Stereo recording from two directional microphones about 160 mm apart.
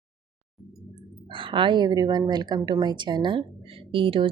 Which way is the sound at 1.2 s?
30° right (ahead or behind).